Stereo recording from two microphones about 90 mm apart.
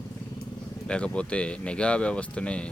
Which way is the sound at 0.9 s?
10° left (ahead or behind).